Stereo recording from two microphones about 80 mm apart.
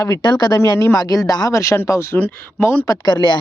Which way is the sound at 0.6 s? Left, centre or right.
Left.